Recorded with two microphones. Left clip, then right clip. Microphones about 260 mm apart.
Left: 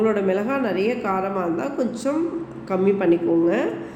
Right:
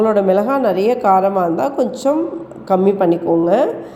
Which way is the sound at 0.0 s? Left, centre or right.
Right.